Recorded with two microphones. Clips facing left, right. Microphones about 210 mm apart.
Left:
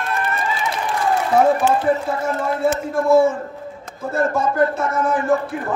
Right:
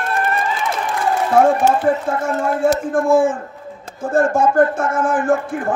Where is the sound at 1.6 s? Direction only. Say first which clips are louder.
Right 2 dB; 50° right (ahead or behind).